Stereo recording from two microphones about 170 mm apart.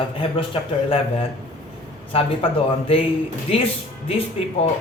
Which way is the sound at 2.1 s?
35° left (ahead or behind).